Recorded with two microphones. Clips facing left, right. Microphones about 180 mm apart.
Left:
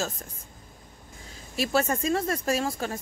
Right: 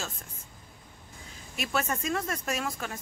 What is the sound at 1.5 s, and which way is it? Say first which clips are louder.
Speech: left 6 dB; 35° left (ahead or behind).